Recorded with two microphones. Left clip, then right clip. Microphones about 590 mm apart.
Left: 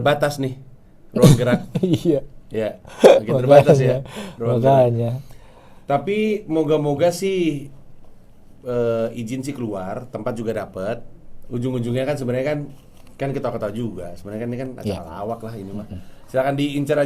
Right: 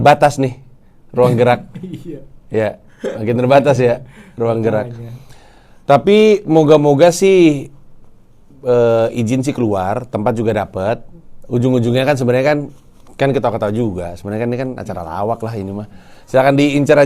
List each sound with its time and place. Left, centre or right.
0.0 s speech: right
1.7 s speech: left
2.5 s speech: right
4.0 s speech: left
5.8 s speech: right
8.6 s speech: right